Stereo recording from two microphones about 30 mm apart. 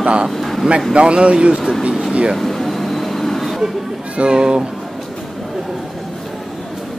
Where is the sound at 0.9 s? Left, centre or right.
Right.